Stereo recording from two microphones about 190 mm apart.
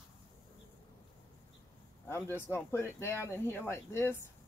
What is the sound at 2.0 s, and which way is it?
Speech, 10° left (ahead or behind).